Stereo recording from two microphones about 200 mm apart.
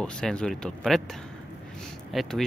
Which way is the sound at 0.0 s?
5° left (ahead or behind).